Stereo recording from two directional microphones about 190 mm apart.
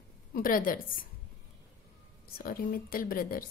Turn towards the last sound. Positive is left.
turn(degrees=50)  # may be behind; listen again after turning